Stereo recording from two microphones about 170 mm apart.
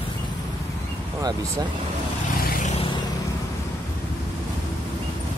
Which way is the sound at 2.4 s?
50° left (ahead or behind).